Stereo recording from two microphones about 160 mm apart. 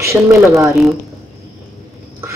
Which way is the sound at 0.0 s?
20° right (ahead or behind).